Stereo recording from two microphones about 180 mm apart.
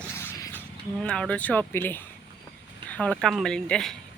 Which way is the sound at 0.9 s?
5° left (ahead or behind).